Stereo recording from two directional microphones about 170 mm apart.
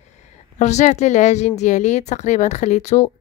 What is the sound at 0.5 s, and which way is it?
Speech, 45° left (ahead or behind).